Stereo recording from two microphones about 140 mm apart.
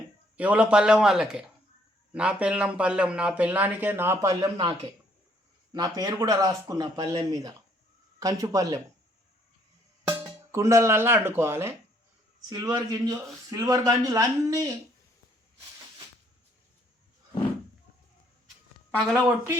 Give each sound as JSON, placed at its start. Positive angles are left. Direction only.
{"t": 0.3, "sound": "a man's voice", "side_deg": -10}
{"t": 5.7, "sound": "speech", "side_deg": -25}
{"t": 10.1, "sound": "speech", "side_deg": -15}
{"t": 18.9, "sound": "a man's voice", "side_deg": 0}